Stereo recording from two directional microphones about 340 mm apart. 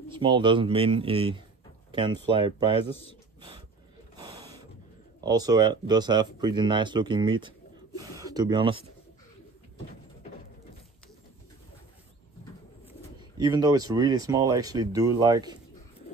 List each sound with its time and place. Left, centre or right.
0.1 s speech: centre
2.9 s a man's voice: centre
5.2 s speech: centre
13.4 s speech: centre